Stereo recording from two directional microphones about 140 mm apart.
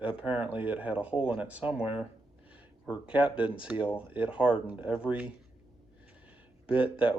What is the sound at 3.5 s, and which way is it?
Speech, 10° right (ahead or behind).